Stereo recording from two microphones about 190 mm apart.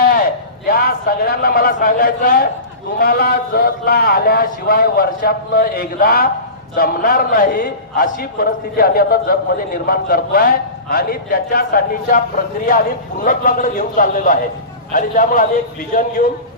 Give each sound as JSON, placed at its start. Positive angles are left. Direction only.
{"t": 0.7, "sound": "a man's voice", "side_deg": 50}
{"t": 13.2, "sound": "a man's voice", "side_deg": 45}